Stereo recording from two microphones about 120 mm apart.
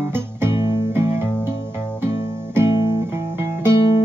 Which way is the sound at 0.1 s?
20° right (ahead or behind).